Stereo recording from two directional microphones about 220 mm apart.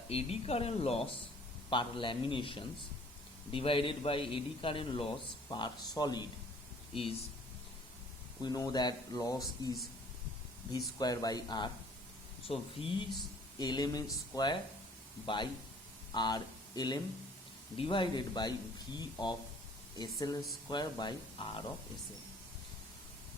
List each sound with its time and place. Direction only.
0.1 s a man's voice: 25° left (ahead or behind)
8.4 s a man's voice: 20° left (ahead or behind)
16.1 s a man's voice: 20° left (ahead or behind)